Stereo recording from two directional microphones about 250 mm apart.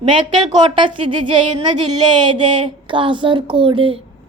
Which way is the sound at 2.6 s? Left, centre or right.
Centre.